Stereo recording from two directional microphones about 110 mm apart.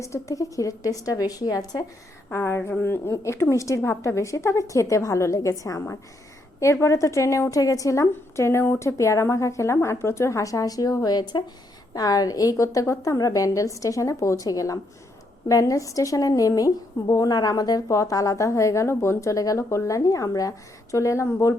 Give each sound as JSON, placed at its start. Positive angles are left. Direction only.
{"t": 0.0, "sound": "a woman's voice", "side_deg": 30}
{"t": 2.3, "sound": "a woman's voice", "side_deg": 25}